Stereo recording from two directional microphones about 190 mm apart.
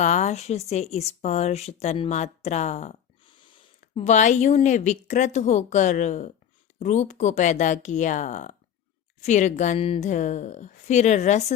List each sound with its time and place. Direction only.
0.0 s speech: 35° left (ahead or behind)
4.0 s a woman's voice: 40° left (ahead or behind)